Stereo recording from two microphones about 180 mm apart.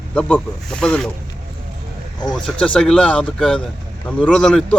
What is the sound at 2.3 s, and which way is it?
Speech, 5° left (ahead or behind).